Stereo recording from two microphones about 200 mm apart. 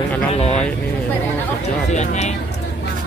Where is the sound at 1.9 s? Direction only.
35° left (ahead or behind).